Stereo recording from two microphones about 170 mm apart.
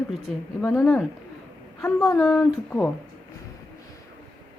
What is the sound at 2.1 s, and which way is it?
Speech, 15° left (ahead or behind).